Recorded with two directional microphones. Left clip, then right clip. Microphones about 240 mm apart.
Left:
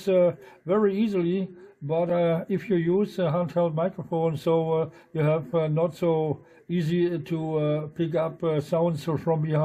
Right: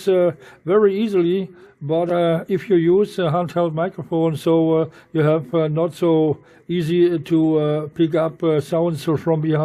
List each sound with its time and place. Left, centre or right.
0.0 s speech: right